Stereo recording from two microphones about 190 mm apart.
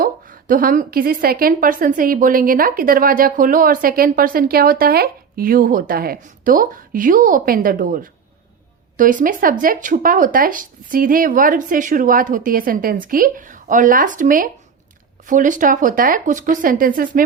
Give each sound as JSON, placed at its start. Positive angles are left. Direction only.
{"t": 0.0, "sound": "a woman's voice", "side_deg": -45}